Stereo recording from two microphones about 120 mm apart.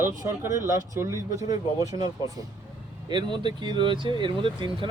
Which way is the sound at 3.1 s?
40° right (ahead or behind).